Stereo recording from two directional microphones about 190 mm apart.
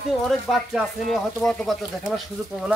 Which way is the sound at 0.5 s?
5° left (ahead or behind).